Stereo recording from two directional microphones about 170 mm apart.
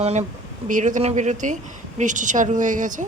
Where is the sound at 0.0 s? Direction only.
40° right (ahead or behind).